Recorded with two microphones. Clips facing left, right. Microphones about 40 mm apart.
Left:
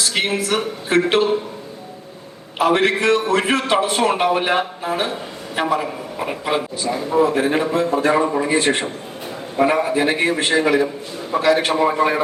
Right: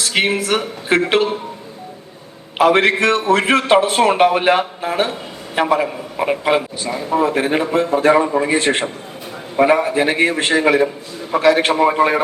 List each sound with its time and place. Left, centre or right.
0.0 s a man's voice: right
2.6 s a man's voice: right